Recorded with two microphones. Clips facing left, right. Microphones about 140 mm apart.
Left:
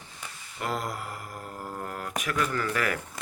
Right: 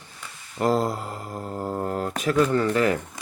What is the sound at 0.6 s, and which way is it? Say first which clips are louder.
Speech: right 9 dB; 30° right (ahead or behind).